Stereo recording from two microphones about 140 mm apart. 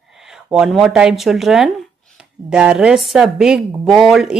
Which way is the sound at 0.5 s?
Centre (ahead or behind).